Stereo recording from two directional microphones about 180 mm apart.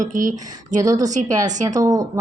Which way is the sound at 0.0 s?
45° right (ahead or behind).